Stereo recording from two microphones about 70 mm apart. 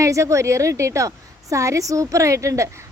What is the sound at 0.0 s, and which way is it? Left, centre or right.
A woman's voice, right.